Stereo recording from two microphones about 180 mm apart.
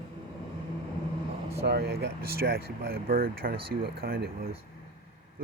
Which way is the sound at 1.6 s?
65° right (ahead or behind).